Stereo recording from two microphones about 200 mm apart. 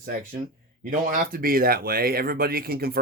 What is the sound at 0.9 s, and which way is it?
Speech, 45° right (ahead or behind).